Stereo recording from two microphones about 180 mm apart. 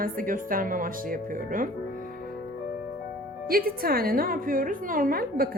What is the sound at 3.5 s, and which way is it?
A woman's voice, 55° right (ahead or behind).